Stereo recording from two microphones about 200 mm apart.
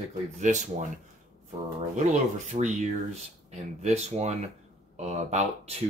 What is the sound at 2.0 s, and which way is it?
Speech, 35° right (ahead or behind).